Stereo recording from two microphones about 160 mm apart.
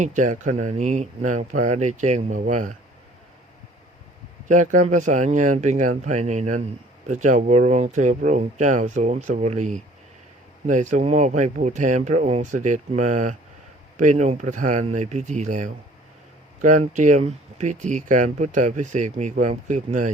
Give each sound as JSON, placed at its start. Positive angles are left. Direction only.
{"t": 0.0, "sound": "speech", "side_deg": -50}
{"t": 4.4, "sound": "speech", "side_deg": -50}